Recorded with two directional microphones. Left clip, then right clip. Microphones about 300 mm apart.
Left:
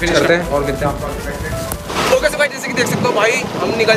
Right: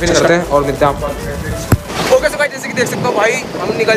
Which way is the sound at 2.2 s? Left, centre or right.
Centre.